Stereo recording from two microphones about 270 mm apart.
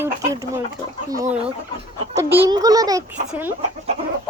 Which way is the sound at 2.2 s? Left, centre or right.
Centre.